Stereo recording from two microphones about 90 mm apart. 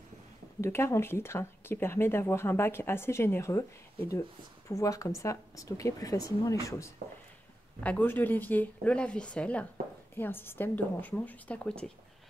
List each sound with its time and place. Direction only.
0.6 s speech: 25° left (ahead or behind)
7.8 s speech: 20° left (ahead or behind)
10.1 s speech: 25° left (ahead or behind)